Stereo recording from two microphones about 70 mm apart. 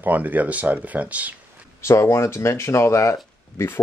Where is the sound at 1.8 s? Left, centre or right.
Left.